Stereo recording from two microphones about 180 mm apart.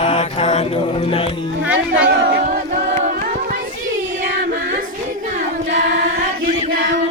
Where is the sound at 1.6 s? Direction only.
5° right (ahead or behind).